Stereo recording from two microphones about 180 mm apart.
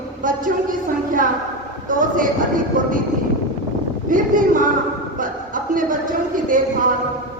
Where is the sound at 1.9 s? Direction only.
50° right (ahead or behind).